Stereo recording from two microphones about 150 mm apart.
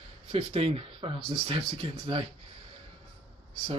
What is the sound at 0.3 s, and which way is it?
Speech, 40° right (ahead or behind).